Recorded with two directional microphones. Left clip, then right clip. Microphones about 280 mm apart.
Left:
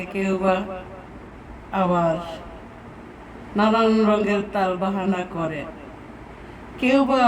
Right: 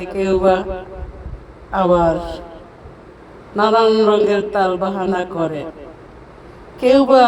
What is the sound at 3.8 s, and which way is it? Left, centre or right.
Speech, right.